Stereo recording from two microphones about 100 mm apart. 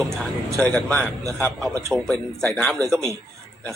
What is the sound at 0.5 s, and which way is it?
A man's voice, 10° left (ahead or behind).